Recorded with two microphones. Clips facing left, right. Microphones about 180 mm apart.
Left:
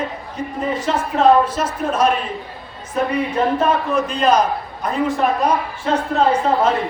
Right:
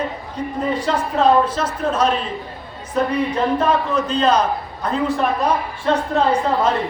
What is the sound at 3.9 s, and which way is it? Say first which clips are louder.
A man's voice: left 1 dB; 10° left (ahead or behind).